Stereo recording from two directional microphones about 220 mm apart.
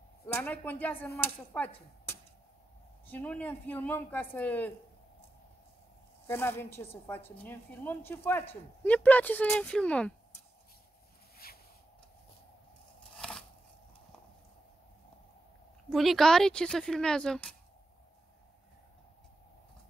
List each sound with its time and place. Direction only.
0.3 s speech: 10° left (ahead or behind)
6.2 s speech: 10° left (ahead or behind)
11.4 s a sound: 40° left (ahead or behind)
13.2 s scissors: 5° left (ahead or behind)
15.9 s speech: centre (ahead or behind)